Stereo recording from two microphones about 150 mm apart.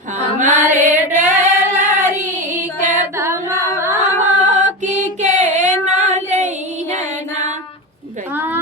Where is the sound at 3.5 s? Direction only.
20° left (ahead or behind).